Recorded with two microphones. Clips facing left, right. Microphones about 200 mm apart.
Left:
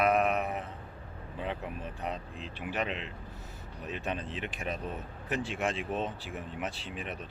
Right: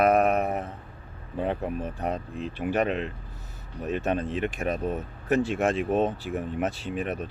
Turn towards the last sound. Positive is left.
turn(degrees=-45)  # may be behind; listen again after turning